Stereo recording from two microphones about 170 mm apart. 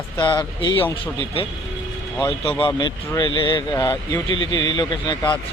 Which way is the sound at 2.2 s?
30° left (ahead or behind).